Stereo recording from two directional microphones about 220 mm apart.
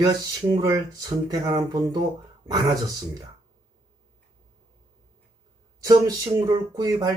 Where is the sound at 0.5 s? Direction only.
15° right (ahead or behind).